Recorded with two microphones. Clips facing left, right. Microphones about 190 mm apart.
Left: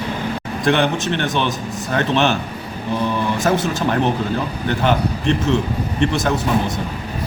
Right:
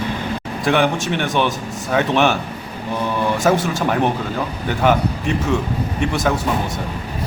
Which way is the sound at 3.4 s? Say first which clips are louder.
Right 1 dB; 10° right (ahead or behind).